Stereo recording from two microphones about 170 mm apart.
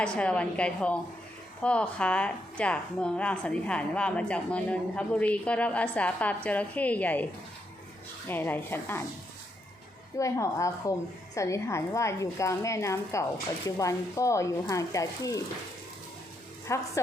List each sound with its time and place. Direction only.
0.0 s a woman's voice: 5° left (ahead or behind)
8.3 s a woman's voice: 10° left (ahead or behind)
10.2 s a woman's voice: 20° left (ahead or behind)
16.6 s a woman's voice: 15° left (ahead or behind)